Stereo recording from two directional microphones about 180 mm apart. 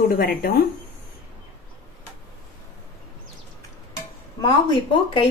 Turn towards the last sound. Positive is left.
turn(degrees=25)  # may be behind; listen again after turning